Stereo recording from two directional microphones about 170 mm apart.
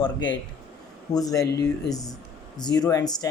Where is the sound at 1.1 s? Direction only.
20° left (ahead or behind).